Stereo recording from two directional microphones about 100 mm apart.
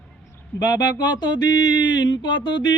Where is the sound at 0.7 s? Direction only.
45° left (ahead or behind).